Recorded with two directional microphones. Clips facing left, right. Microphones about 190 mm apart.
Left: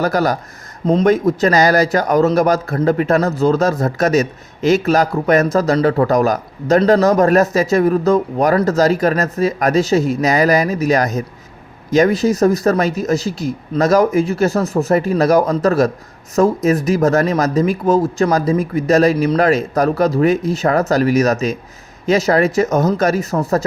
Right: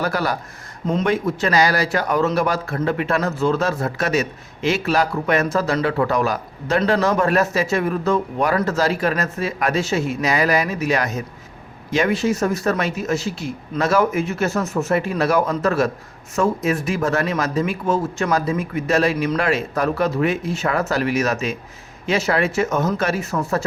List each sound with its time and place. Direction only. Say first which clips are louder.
0.0 s speech: left 6 dB; 40° left (ahead or behind)